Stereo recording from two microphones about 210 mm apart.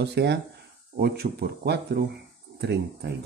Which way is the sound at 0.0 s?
55° right (ahead or behind).